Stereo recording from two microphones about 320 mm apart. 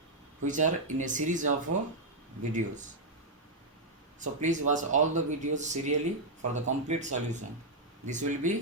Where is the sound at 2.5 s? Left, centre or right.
Right.